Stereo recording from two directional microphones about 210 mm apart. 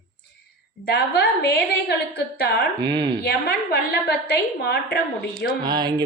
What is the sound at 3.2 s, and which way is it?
A woman's voice, 50° left (ahead or behind).